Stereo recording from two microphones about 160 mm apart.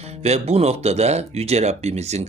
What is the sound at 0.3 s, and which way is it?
Speech, 40° right (ahead or behind).